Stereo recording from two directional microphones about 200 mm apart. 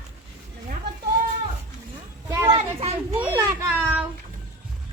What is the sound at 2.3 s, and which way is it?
Children playing, 15° right (ahead or behind).